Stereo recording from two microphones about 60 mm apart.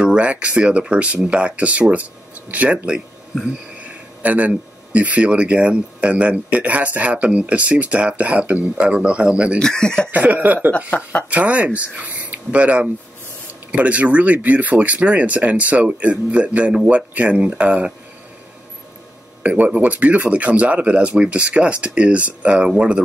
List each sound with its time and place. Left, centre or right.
0.0 s speech: centre
4.2 s speech: right
9.6 s speech: centre
10.1 s speech: right
10.9 s speech: left
11.2 s speech: right
19.4 s speech: right